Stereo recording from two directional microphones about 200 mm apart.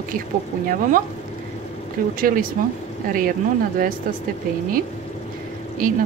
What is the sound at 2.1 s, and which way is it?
Speech, 45° right (ahead or behind).